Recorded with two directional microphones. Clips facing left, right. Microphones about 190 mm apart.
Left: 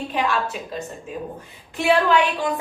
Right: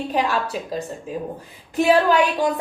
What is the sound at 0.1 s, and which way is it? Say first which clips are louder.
Speech: right 1 dB; 40° right (ahead or behind).